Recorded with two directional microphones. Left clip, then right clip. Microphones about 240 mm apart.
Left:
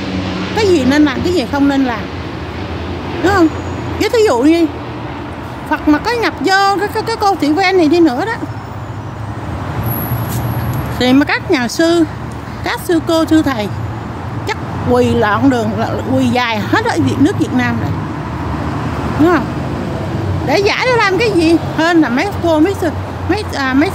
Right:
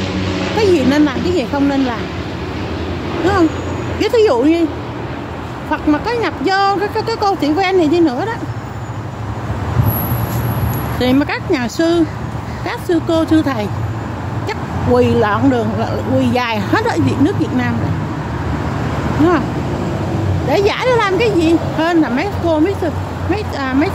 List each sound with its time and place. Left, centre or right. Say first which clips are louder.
0.6 s speech: left 2 dB; centre
4.0 s speech: left 1 dB; centre
5.7 s speech: left 3 dB; centre
11.0 s speech: left 4 dB; centre
20.4 s speech: left 2 dB; centre